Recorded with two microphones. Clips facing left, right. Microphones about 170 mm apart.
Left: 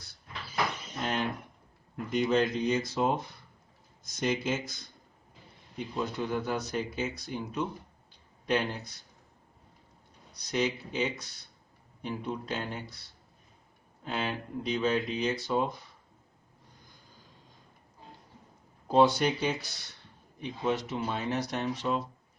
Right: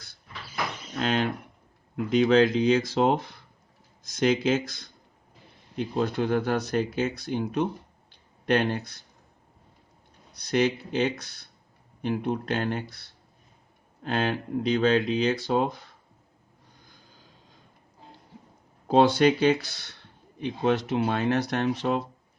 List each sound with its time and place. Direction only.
0.9 s speech: 90° right; by 8.8 s 75° right (ahead or behind)
10.5 s speech: 80° right
14.0 s speech: 75° right (ahead or behind)
18.9 s speech: 90° right